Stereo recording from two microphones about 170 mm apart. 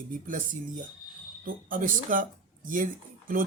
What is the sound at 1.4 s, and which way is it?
Speech, 55° right (ahead or behind).